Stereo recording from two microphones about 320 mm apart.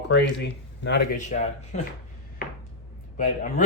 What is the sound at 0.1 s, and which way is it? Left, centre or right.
Speech, left.